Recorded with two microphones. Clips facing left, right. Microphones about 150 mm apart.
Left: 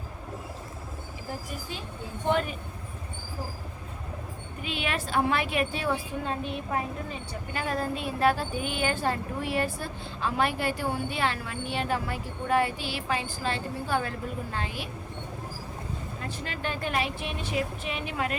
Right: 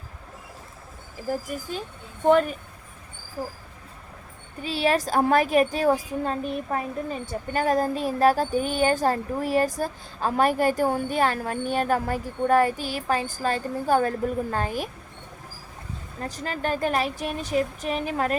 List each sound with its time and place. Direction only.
1.5 s a woman's voice: 45° right (ahead or behind)
4.6 s a woman's voice: 35° right (ahead or behind)
16.2 s a woman's voice: 40° right (ahead or behind)